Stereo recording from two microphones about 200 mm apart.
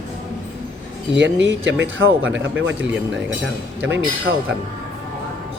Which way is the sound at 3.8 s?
65° right (ahead or behind).